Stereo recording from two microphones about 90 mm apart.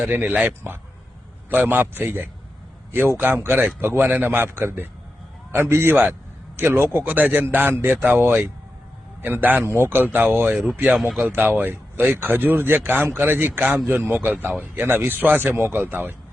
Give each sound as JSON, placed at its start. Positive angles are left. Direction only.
{"t": 0.0, "sound": "speech", "side_deg": -20}
{"t": 10.9, "sound": "speech", "side_deg": -5}
{"t": 11.3, "sound": "speech", "side_deg": -20}